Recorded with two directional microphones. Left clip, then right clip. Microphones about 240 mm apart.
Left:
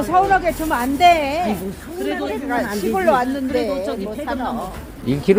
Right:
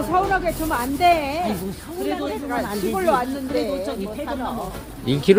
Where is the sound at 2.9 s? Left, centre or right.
Left.